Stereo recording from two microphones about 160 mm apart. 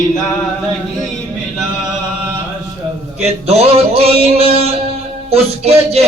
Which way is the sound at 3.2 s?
40° right (ahead or behind).